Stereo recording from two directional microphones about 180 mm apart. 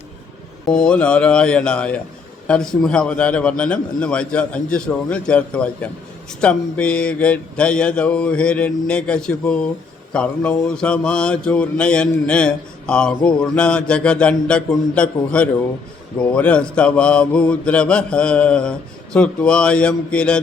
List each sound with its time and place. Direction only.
0.7 s mantra: 5° left (ahead or behind)